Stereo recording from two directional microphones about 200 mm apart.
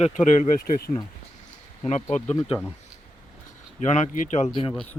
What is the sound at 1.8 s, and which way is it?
Speech, 35° left (ahead or behind).